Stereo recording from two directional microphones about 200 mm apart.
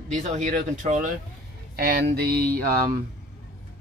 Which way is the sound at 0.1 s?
35° right (ahead or behind).